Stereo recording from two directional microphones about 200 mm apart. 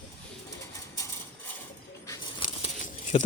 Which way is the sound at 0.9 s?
15° left (ahead or behind).